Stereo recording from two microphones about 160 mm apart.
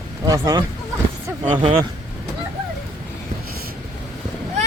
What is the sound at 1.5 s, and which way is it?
Speech, 35° right (ahead or behind).